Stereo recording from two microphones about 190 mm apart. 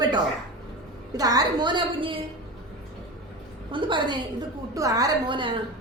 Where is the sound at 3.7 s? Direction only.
25° right (ahead or behind).